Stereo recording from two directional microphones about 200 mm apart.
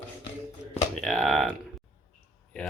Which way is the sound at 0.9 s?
Centre (ahead or behind).